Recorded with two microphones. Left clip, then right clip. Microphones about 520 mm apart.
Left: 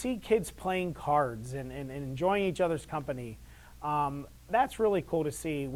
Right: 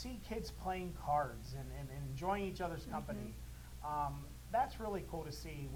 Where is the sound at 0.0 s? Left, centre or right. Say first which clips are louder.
Left 17 dB; left.